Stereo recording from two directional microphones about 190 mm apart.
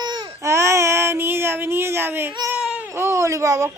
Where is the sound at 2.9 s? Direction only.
15° right (ahead or behind).